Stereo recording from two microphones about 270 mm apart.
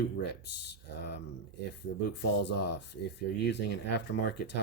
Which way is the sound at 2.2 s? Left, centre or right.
Left.